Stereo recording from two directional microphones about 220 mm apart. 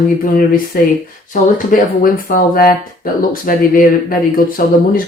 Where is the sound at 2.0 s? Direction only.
40° left (ahead or behind).